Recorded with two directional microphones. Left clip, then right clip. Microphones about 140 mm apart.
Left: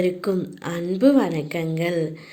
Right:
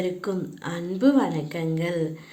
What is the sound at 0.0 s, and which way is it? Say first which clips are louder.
A woman's voice: left 5 dB; 25° left (ahead or behind).